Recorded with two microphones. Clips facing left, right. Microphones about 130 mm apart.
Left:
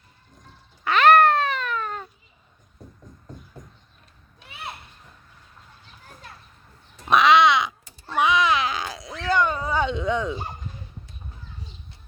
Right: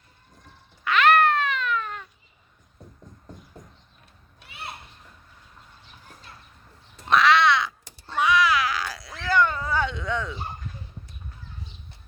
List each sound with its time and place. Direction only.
0.9 s cat: 35° left (ahead or behind)
7.1 s crow: 15° left (ahead or behind)
8.1 s a sound: 20° left (ahead or behind)